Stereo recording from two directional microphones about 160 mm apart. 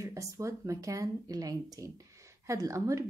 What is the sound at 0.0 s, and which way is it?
A woman's voice, 20° right (ahead or behind).